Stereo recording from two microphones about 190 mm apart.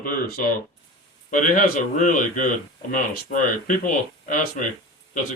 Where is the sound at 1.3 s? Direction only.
45° left (ahead or behind).